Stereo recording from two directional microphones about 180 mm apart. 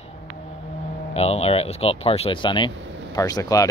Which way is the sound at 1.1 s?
35° left (ahead or behind).